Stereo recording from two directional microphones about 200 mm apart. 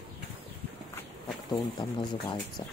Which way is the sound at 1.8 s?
25° left (ahead or behind).